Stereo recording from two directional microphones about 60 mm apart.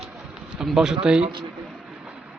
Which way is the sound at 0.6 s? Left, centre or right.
Centre.